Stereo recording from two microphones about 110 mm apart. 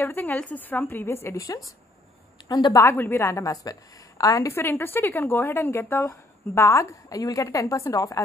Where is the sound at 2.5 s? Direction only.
40° left (ahead or behind).